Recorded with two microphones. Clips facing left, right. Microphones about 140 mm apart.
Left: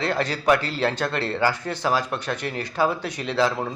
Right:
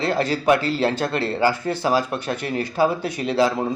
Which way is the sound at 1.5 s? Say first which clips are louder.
Right 3 dB; 10° right (ahead or behind).